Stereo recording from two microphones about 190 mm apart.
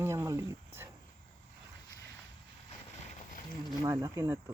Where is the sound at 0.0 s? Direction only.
15° right (ahead or behind).